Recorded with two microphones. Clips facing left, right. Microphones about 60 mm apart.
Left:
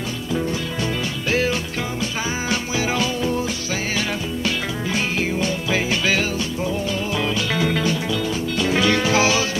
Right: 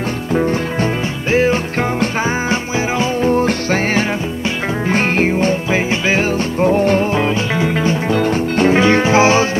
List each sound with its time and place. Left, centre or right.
0.3 s music: right
1.3 s music: right
6.3 s music: right
8.1 s music: right